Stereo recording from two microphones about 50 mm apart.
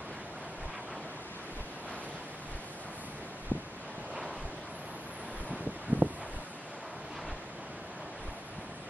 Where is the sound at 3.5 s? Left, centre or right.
Left.